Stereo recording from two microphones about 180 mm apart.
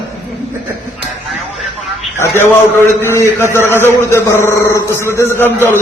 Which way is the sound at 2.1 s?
15° left (ahead or behind).